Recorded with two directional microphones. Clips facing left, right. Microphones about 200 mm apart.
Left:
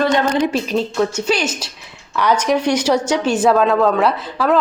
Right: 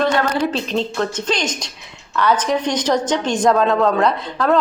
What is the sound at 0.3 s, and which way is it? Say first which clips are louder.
A woman's voice: left 2 dB; 15° left (ahead or behind).